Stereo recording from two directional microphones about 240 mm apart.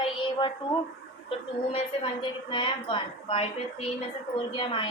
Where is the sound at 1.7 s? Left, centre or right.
Left.